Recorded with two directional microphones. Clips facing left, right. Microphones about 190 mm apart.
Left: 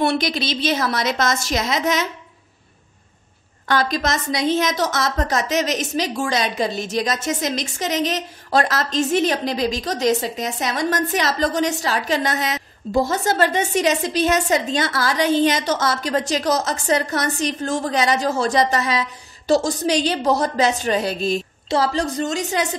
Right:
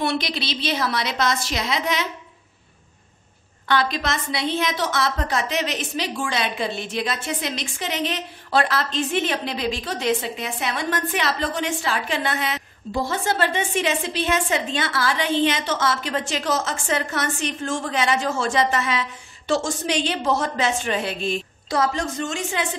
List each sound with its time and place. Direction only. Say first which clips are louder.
0.0 s a woman's voice: left 4 dB; 45° left (ahead or behind)
3.6 s a woman's voice: left 2 dB; 45° left (ahead or behind)